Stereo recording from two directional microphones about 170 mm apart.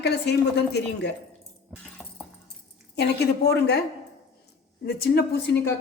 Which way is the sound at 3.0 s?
75° left (ahead or behind).